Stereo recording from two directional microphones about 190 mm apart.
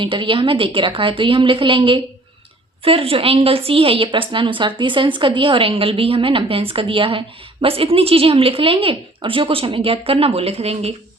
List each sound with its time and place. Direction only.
0.0 s a woman's voice: 25° right (ahead or behind)